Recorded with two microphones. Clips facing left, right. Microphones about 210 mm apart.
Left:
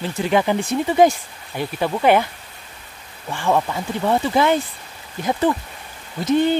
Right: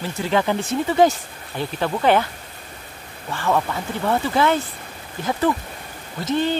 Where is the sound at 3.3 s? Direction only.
15° left (ahead or behind).